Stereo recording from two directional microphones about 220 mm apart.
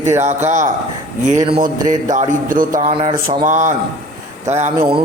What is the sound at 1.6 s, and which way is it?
A man's voice, 35° right (ahead or behind).